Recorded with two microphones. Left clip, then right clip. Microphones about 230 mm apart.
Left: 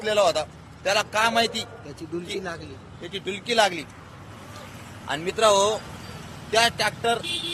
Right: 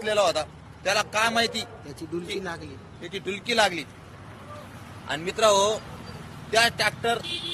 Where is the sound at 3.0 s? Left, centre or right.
Centre.